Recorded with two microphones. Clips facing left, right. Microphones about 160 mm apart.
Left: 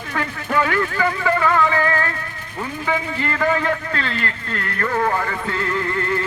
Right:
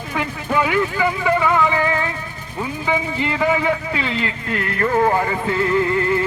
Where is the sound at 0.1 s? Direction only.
10° right (ahead or behind).